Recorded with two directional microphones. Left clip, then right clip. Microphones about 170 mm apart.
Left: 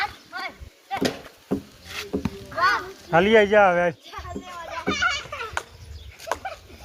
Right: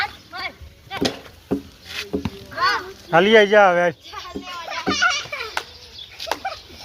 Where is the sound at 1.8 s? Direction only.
60° left (ahead or behind).